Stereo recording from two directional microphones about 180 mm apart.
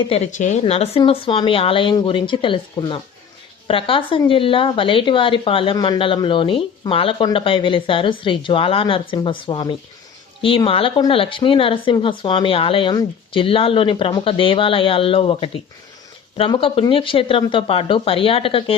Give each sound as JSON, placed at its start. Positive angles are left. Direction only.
{"t": 0.3, "sound": "a woman's voice", "side_deg": 40}